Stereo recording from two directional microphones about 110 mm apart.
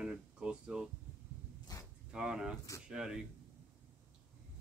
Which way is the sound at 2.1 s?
5° right (ahead or behind).